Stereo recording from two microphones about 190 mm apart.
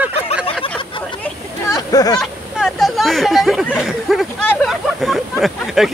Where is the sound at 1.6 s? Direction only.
20° left (ahead or behind).